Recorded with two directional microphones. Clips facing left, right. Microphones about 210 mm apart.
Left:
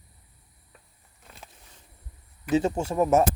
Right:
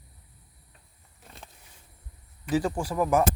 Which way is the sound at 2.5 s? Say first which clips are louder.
Left 3 dB; 25° left (ahead or behind).